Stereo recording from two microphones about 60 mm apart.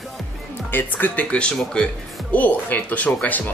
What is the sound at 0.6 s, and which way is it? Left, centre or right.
Speech, left.